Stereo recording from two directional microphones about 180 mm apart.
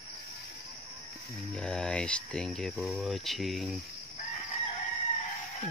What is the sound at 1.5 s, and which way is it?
Speech, 5° left (ahead or behind).